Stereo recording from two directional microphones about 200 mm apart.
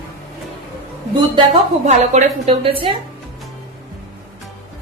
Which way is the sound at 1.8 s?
35° right (ahead or behind).